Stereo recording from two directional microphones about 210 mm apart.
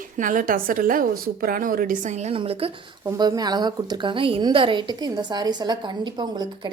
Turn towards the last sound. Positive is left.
turn(degrees=-20)  # may be behind; listen again after turning